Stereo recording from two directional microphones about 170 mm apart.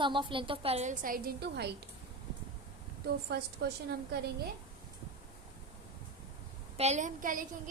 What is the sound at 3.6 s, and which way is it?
Speech, 75° right (ahead or behind).